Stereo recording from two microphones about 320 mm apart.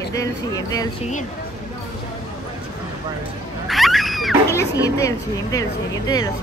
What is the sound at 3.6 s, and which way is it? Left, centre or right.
Children playing, centre.